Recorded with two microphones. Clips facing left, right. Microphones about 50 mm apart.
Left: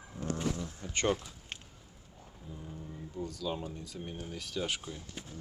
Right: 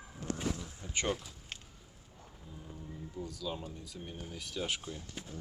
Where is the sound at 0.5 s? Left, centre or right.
Centre.